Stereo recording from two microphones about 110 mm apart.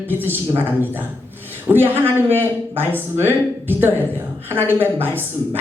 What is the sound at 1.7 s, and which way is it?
Speech, 20° right (ahead or behind).